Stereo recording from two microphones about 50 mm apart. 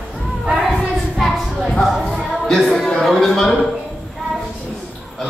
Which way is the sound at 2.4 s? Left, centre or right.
Centre.